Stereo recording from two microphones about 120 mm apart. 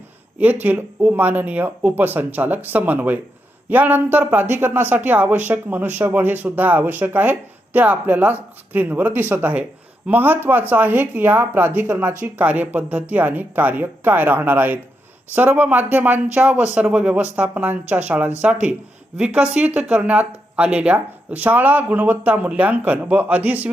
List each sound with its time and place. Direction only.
0.3 s speech: 15° right (ahead or behind)